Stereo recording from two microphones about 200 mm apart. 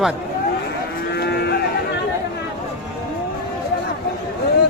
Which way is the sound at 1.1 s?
55° left (ahead or behind).